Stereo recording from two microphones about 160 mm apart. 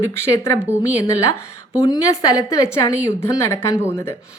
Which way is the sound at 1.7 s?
20° left (ahead or behind).